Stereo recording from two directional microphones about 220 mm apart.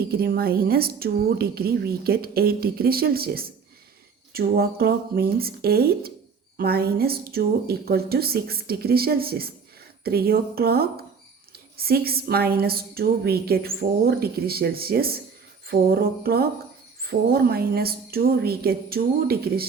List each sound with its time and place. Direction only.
0.1 s a woman's voice: 45° right (ahead or behind)